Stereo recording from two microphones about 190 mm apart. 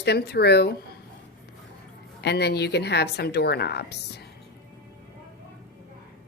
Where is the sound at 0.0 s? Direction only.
60° left (ahead or behind).